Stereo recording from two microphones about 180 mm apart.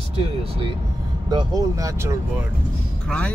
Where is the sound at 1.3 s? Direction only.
20° right (ahead or behind).